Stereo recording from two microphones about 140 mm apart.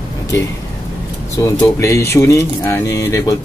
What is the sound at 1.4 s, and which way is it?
Speech, 25° left (ahead or behind).